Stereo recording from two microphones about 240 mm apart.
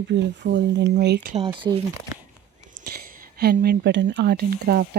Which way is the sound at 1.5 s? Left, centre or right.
Centre.